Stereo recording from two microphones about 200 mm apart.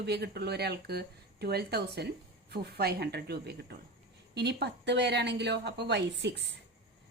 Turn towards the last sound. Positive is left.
turn(degrees=-60)  # may be behind; listen again after turning